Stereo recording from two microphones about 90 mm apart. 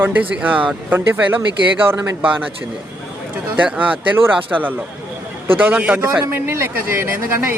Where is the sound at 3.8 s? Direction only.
20° right (ahead or behind).